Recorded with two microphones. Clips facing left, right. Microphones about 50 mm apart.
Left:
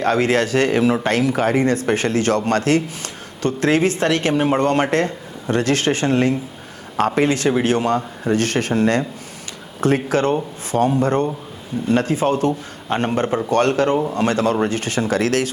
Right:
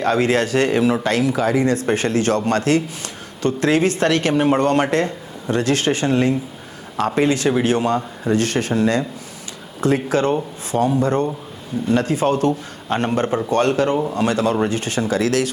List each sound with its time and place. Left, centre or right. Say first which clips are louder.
0.0 s speech: even; left
13.5 s speech: left 1 dB; left